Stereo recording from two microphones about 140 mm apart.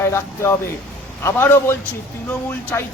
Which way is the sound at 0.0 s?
20° left (ahead or behind).